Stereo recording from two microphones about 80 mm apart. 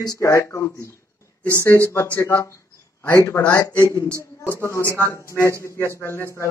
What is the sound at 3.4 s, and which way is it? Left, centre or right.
Speech, centre.